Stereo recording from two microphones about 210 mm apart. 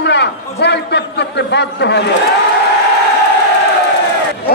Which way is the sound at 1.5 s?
55° left (ahead or behind).